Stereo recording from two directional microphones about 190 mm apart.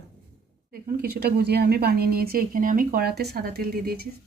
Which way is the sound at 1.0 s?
55° right (ahead or behind).